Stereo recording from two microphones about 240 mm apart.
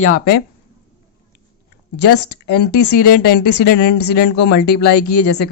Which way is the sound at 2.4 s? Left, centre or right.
Left.